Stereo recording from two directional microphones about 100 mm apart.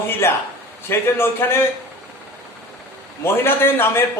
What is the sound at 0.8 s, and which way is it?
Speech, 20° left (ahead or behind).